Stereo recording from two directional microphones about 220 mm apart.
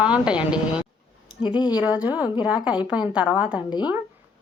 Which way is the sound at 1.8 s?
5° right (ahead or behind).